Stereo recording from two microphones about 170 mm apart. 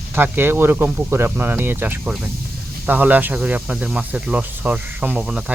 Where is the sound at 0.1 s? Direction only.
10° right (ahead or behind).